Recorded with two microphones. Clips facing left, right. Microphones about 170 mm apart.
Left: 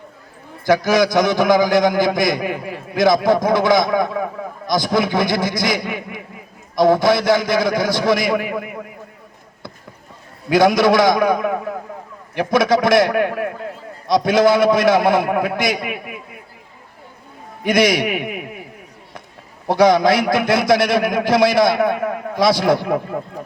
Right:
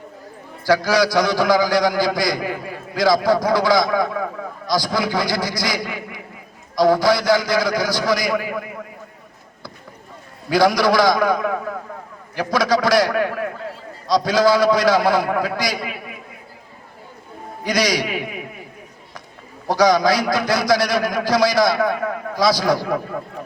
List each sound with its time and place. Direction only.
0.6 s a man's voice: 20° left (ahead or behind)
10.5 s a man's voice: 20° left (ahead or behind)
17.6 s a man's voice: 25° left (ahead or behind)
19.6 s a man's voice: 25° left (ahead or behind)